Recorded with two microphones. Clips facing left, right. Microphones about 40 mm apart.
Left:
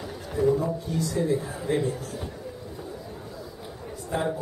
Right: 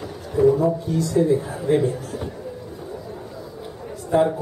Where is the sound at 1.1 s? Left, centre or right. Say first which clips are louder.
Right 8 dB; centre.